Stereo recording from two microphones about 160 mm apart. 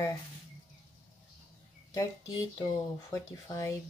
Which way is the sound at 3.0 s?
20° left (ahead or behind).